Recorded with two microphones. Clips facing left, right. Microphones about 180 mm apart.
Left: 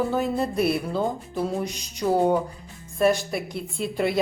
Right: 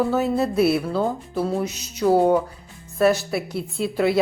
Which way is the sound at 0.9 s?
15° left (ahead or behind).